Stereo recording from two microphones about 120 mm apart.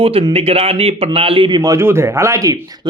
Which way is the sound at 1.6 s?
25° right (ahead or behind).